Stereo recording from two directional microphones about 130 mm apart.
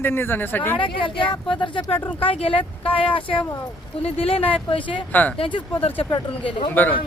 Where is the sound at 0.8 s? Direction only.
40° left (ahead or behind).